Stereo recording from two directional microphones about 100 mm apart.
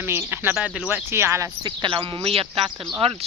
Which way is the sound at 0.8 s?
20° right (ahead or behind).